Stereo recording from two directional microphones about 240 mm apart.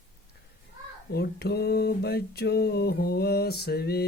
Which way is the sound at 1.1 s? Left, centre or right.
Left.